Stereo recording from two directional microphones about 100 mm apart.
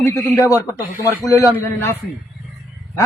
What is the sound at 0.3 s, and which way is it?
Speech, 35° left (ahead or behind).